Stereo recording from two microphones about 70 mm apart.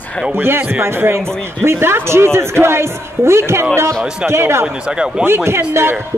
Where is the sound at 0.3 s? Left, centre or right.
Right.